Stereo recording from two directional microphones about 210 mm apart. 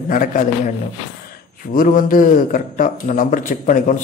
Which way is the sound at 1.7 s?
40° left (ahead or behind).